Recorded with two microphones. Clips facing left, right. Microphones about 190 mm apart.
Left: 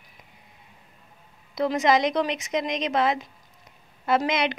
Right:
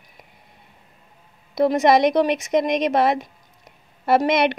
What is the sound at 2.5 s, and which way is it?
Speech, 55° right (ahead or behind).